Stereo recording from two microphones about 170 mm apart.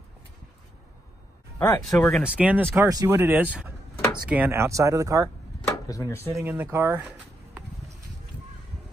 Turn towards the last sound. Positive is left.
turn(degrees=-10)  # may be behind; listen again after turning